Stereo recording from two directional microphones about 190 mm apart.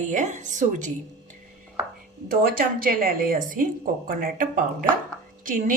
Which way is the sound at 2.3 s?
50° right (ahead or behind).